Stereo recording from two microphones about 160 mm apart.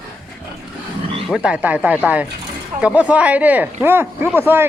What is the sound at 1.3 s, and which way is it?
Speech, 5° right (ahead or behind).